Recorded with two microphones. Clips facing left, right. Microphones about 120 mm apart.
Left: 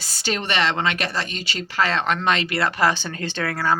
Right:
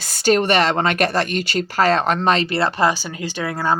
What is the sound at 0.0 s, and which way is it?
Speech, 50° right (ahead or behind).